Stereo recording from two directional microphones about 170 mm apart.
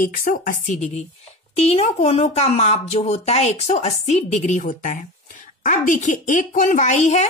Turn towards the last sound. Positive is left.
turn(degrees=40)  # may be behind; listen again after turning